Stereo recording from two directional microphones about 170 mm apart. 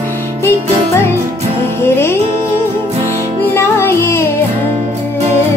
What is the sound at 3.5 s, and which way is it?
Music, 15° left (ahead or behind).